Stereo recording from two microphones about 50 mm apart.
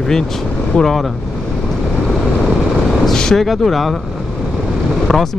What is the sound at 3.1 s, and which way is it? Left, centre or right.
Speech, centre.